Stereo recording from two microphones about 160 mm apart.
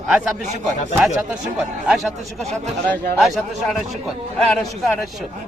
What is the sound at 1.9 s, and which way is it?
A man's voice, centre (ahead or behind).